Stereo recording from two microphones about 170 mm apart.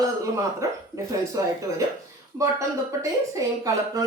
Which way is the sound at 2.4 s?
20° right (ahead or behind).